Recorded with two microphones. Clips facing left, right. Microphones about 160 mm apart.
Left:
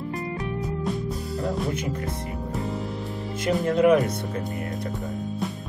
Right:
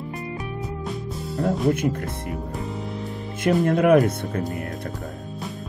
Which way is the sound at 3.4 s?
55° right (ahead or behind).